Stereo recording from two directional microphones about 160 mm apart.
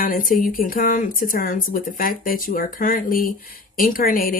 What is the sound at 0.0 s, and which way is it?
A woman's voice, 60° left (ahead or behind).